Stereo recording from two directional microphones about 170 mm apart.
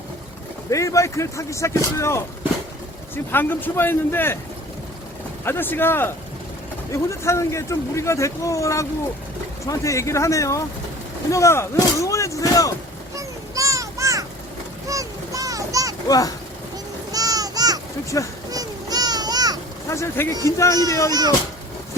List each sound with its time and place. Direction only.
0.7 s speech: 20° left (ahead or behind)
3.3 s speech: 10° left (ahead or behind)
5.5 s speech: 10° left (ahead or behind)
13.1 s a sound: 20° right (ahead or behind)
16.0 s speech: 20° left (ahead or behind)
17.1 s music: 20° right (ahead or behind)
18.5 s a sound: 20° right (ahead or behind)
19.9 s speech: 15° left (ahead or behind)
21.1 s a child's voice: 25° right (ahead or behind)